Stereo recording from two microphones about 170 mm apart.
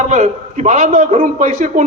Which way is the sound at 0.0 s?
45° right (ahead or behind).